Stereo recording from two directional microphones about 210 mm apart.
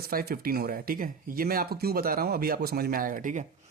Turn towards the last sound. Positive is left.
turn(degrees=-40)  # may be behind; listen again after turning